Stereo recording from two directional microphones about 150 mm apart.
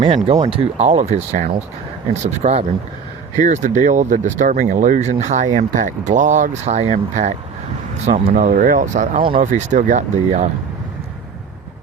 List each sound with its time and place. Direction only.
0.3 s speech: 45° right (ahead or behind)
8.3 s speech: 65° right (ahead or behind)